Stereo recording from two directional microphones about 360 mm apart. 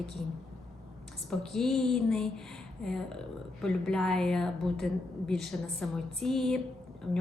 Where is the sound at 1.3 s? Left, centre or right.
Centre.